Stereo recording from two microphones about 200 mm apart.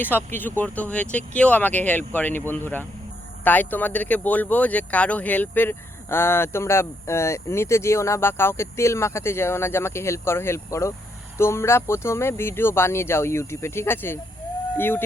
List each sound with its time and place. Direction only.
0.3 s speech: 10° left (ahead or behind)